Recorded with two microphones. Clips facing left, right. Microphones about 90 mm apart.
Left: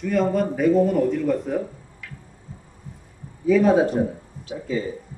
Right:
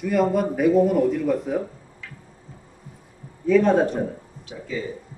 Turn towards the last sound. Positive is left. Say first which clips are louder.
# left 4 dB
turn(degrees=40)  # may be behind; listen again after turning